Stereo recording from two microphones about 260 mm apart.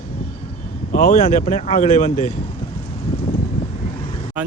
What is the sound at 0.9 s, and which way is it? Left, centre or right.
Speech, left.